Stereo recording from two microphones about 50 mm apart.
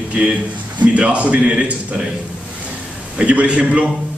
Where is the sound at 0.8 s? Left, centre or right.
Right.